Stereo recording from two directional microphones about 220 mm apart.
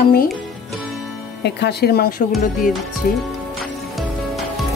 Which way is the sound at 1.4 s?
50° left (ahead or behind).